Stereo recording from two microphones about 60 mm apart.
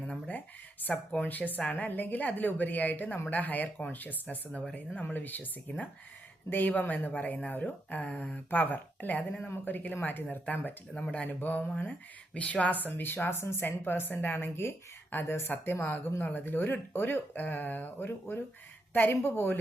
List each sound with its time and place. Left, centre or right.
0.1 s speech: left
12.9 s speech: left